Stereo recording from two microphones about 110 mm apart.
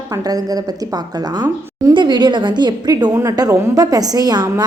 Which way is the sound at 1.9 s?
45° right (ahead or behind).